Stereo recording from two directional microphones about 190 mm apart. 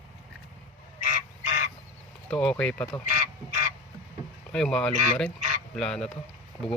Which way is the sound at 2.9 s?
15° left (ahead or behind).